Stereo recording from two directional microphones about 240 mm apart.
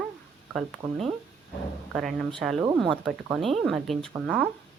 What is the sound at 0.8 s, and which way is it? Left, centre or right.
Speech, centre.